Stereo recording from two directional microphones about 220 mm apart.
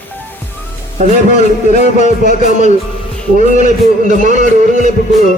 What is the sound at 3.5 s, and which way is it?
Speech, 35° right (ahead or behind).